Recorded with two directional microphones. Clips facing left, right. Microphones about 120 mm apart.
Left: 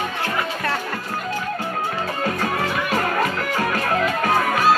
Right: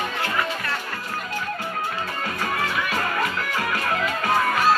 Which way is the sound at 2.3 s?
35° left (ahead or behind).